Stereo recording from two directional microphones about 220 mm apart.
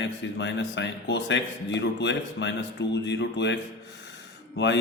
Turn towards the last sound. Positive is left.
turn(degrees=55)  # may be behind; listen again after turning